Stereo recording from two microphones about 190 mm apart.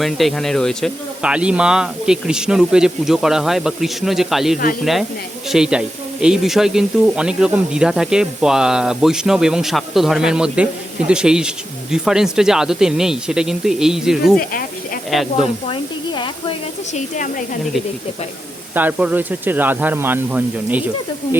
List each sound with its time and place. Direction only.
0.0 s speech: centre (ahead or behind)
15.7 s a sound: 25° left (ahead or behind)
16.9 s speech: 40° left (ahead or behind)
18.7 s speech: 10° right (ahead or behind)